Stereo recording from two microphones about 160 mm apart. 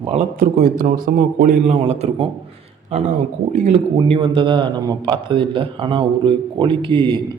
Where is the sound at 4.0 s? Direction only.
35° right (ahead or behind).